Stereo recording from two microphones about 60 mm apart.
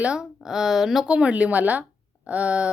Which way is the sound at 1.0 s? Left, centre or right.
Right.